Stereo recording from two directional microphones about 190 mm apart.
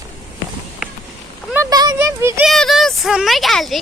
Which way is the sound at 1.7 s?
20° right (ahead or behind).